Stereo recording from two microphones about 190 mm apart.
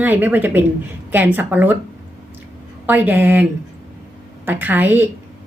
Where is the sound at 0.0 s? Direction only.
10° right (ahead or behind).